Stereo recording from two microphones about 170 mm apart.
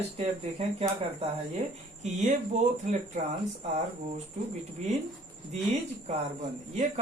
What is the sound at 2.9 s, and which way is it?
Speech, 40° right (ahead or behind).